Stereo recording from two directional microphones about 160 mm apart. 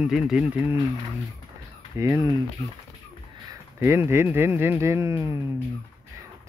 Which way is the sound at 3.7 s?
15° right (ahead or behind).